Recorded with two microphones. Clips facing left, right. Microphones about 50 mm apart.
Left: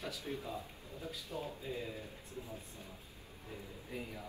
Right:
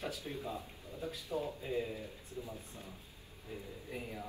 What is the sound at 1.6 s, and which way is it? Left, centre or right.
Speech, right.